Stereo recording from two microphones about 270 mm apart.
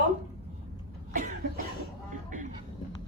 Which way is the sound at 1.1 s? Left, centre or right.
Right.